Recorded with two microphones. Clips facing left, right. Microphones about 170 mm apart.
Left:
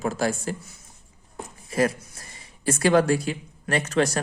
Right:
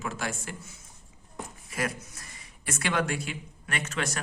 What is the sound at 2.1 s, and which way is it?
Speech, 30° left (ahead or behind).